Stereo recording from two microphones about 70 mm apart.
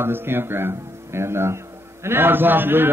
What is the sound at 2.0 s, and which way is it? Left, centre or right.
Speech, right.